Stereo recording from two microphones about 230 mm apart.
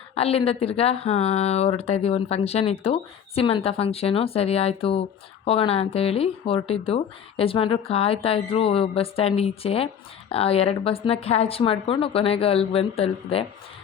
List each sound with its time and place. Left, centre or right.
0.1 s speech: left